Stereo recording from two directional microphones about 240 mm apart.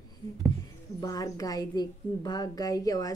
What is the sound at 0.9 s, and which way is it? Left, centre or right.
Speech, centre.